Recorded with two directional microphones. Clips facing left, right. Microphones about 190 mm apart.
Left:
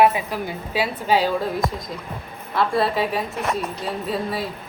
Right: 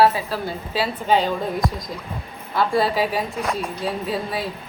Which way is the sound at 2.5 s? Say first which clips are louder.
Right 1 dB; centre (ahead or behind).